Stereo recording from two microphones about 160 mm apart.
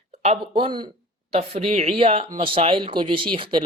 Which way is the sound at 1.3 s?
40° right (ahead or behind).